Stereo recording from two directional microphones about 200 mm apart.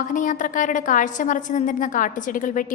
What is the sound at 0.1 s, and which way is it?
A woman's voice, 40° left (ahead or behind).